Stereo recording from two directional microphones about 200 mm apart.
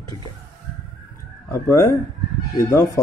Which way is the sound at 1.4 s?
15° left (ahead or behind).